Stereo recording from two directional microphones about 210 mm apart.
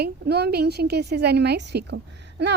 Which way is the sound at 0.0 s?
50° right (ahead or behind).